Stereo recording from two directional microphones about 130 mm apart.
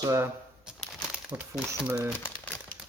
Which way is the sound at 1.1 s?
10° right (ahead or behind).